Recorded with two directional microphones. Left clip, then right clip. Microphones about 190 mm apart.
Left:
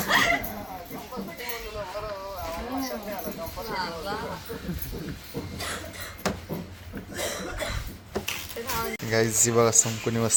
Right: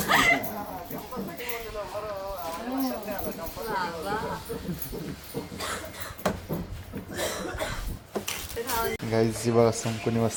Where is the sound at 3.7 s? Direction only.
15° right (ahead or behind).